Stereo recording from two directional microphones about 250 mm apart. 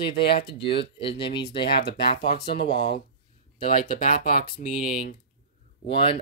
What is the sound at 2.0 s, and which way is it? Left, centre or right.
Speech, left.